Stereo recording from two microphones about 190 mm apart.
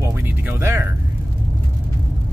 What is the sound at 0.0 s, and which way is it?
Music, 15° right (ahead or behind).